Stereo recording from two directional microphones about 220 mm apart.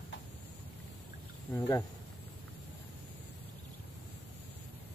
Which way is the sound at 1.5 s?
15° left (ahead or behind).